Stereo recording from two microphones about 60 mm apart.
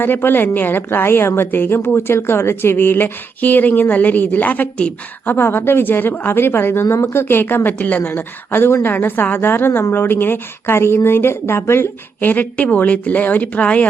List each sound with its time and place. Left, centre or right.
0.0 s a woman's voice: left
5.3 s a woman's voice: left
12.3 s speech: left